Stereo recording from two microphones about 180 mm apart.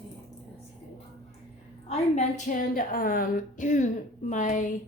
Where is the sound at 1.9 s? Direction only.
40° left (ahead or behind).